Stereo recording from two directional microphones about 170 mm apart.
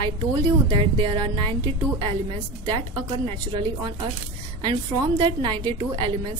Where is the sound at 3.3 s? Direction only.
30° right (ahead or behind).